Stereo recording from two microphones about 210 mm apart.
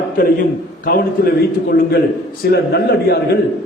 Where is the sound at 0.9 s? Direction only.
45° left (ahead or behind).